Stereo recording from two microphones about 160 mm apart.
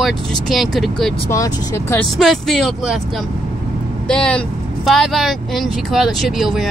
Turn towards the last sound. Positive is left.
turn(degrees=0)  # may be behind; listen again after turning